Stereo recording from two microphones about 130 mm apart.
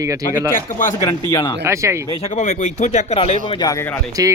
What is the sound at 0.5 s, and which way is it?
Speech, 90° left.